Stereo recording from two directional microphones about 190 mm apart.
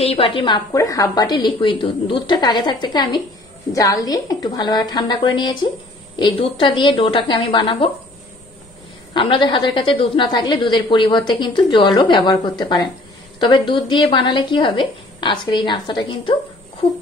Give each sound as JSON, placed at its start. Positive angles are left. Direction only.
{"t": 0.0, "sound": "a woman's voice", "side_deg": 30}
{"t": 9.1, "sound": "a woman's voice", "side_deg": 25}